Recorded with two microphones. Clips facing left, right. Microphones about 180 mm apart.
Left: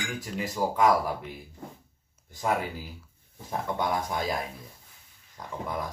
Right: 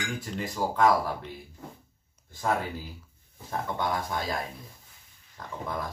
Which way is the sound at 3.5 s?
20° left (ahead or behind).